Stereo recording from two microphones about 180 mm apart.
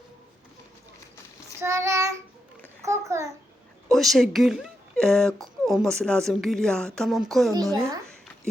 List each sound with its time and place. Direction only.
1.6 s child singing: 15° right (ahead or behind)
3.8 s speech: centre (ahead or behind)